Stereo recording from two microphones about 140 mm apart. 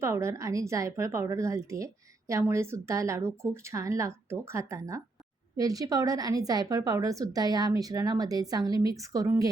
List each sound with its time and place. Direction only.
0.0 s a woman's voice: 20° right (ahead or behind)